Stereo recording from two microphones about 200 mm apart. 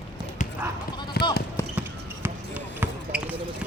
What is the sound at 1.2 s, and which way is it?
Basketball bounce, 55° left (ahead or behind).